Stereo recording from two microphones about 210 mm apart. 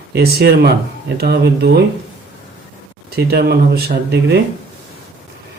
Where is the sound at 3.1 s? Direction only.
50° right (ahead or behind).